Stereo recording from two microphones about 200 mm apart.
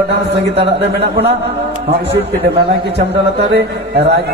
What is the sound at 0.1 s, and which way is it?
A man's voice, 55° right (ahead or behind).